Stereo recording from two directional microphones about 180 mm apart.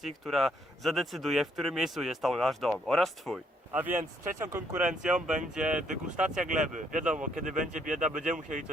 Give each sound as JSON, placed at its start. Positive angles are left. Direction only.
{"t": 0.0, "sound": "speech", "side_deg": 0}
{"t": 3.7, "sound": "speech", "side_deg": -10}
{"t": 4.9, "sound": "speech", "side_deg": -5}
{"t": 6.6, "sound": "speech", "side_deg": -45}